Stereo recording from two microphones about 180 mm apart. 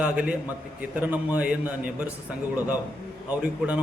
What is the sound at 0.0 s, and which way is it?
A man's voice, 5° right (ahead or behind).